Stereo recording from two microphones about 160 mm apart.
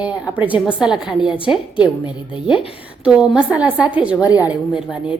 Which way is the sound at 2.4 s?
35° left (ahead or behind).